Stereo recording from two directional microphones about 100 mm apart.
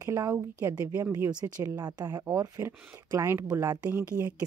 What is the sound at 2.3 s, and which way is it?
Speech, 30° right (ahead or behind).